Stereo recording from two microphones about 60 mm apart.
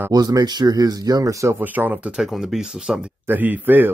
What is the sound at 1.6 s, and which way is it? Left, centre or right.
Speech, right.